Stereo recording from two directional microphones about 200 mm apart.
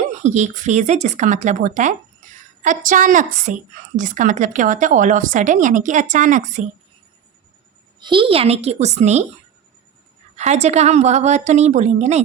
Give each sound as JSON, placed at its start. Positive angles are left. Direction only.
{"t": 0.1, "sound": "a woman's voice", "side_deg": -35}
{"t": 7.9, "sound": "a woman's voice", "side_deg": -25}
{"t": 10.3, "sound": "a woman's voice", "side_deg": -35}